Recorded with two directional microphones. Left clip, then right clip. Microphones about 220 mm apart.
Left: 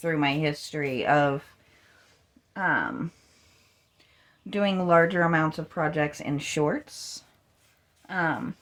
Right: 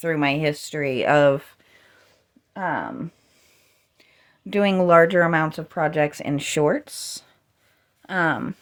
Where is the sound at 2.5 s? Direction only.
20° right (ahead or behind).